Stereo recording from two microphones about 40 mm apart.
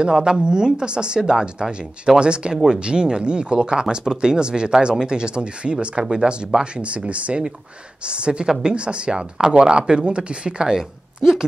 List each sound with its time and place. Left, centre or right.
0.0 s speech: right